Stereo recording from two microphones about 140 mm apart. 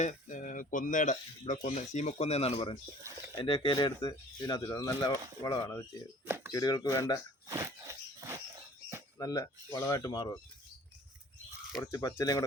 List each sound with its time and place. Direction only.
0.0 s speech: 65° left (ahead or behind); by 5.8 s 20° left (ahead or behind)
6.2 s speech: 15° right (ahead or behind)
6.5 s speech: 30° left (ahead or behind)
7.4 s a sound: 20° right (ahead or behind)
9.1 s speech: 25° left (ahead or behind)
11.8 s speech: 25° left (ahead or behind)